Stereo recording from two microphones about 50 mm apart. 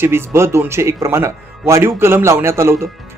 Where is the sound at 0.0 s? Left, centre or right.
Right.